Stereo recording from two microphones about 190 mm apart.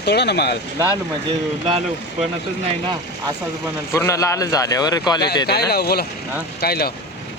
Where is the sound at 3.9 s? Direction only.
15° left (ahead or behind).